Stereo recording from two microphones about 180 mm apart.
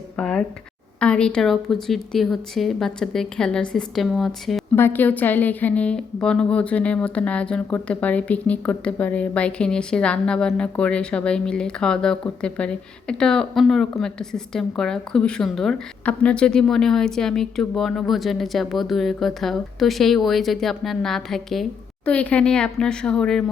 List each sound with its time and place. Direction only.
0.2 s a woman's voice: 5° left (ahead or behind)
4.7 s a woman's voice: 10° left (ahead or behind)